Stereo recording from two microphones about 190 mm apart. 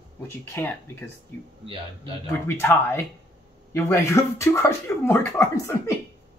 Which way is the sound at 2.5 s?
10° left (ahead or behind).